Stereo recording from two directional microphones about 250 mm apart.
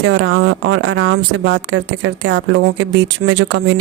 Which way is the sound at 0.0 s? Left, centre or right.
Right.